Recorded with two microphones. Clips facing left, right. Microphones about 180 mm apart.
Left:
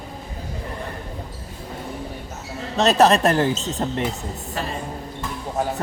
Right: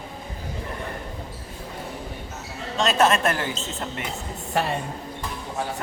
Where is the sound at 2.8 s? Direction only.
40° left (ahead or behind).